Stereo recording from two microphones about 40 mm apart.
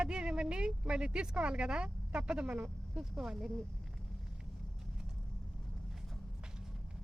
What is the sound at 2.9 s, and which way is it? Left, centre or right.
Speech, centre.